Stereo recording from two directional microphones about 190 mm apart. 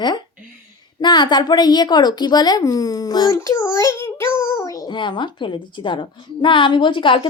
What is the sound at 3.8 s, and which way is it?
Child singing, 10° left (ahead or behind).